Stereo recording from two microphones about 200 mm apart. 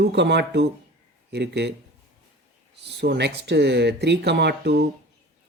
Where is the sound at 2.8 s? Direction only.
60° right (ahead or behind).